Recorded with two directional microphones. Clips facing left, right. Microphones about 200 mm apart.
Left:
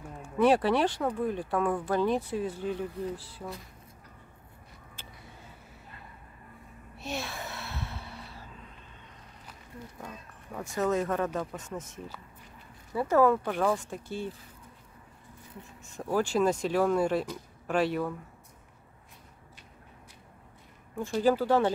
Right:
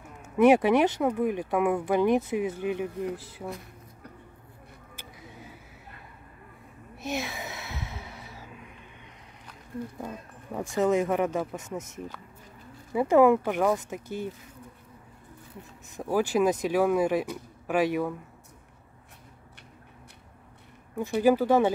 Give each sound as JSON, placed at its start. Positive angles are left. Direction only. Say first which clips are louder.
{"t": 0.4, "sound": "speech", "louder": "right 4 dB", "side_deg": -15}
{"t": 7.0, "sound": "a sound", "louder": "right 4 dB", "side_deg": -15}
{"t": 10.7, "sound": "speech", "louder": "right 4 dB", "side_deg": -15}
{"t": 12.9, "sound": "speech", "louder": "right 4 dB", "side_deg": -15}
{"t": 16.0, "sound": "speech", "louder": "right 2 dB", "side_deg": -10}
{"t": 20.9, "sound": "speech", "louder": "right 3 dB", "side_deg": -15}